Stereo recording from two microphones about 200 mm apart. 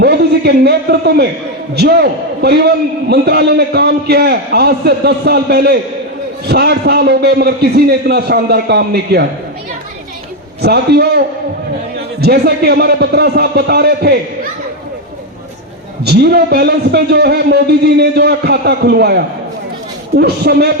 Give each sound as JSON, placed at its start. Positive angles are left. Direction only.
{"t": 0.0, "sound": "a man's voice", "side_deg": -55}
{"t": 10.6, "sound": "a man's voice", "side_deg": -55}
{"t": 12.2, "sound": "a man's voice", "side_deg": -55}
{"t": 16.0, "sound": "a man's voice", "side_deg": -55}